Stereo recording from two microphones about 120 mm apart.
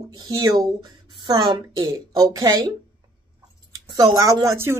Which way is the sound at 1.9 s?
30° right (ahead or behind).